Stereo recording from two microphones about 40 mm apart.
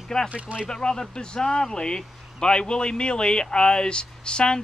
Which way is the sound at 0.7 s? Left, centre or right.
Centre.